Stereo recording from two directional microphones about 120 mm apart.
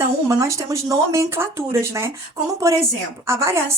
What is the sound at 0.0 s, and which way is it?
Speech, 25° right (ahead or behind).